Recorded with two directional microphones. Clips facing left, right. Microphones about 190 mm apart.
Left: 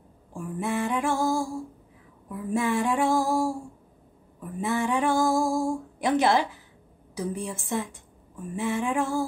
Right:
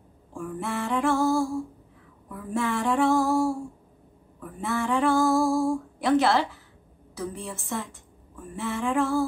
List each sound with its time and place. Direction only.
0.3 s female singing: 15° left (ahead or behind)
4.6 s speech: 15° left (ahead or behind)
7.2 s female singing: 15° left (ahead or behind)